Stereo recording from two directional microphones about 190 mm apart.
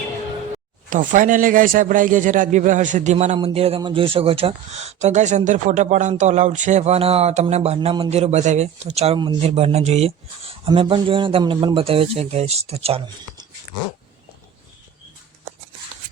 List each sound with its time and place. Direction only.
0.9 s a man's voice: 40° right (ahead or behind)